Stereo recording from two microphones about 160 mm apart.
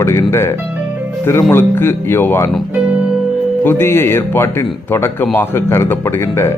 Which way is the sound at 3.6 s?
15° left (ahead or behind).